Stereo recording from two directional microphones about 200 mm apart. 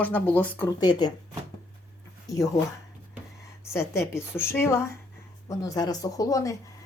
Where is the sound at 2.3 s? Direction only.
20° left (ahead or behind).